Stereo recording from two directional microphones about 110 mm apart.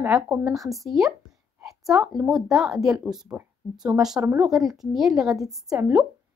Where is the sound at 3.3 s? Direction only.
15° right (ahead or behind).